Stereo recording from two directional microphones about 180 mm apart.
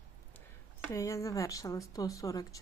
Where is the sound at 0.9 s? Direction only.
15° left (ahead or behind).